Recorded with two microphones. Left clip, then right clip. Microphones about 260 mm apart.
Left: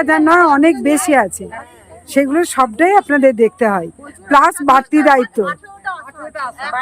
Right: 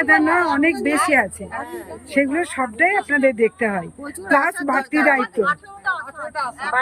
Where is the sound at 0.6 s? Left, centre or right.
Centre.